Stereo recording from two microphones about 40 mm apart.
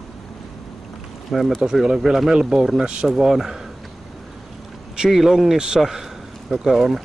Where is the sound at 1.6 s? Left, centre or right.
Centre.